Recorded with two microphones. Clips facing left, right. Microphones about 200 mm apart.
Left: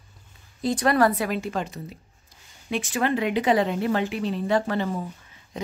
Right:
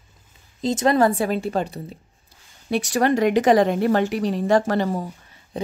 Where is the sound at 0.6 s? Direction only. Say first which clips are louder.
Right 3 dB; 25° right (ahead or behind); by 5.0 s 40° right (ahead or behind).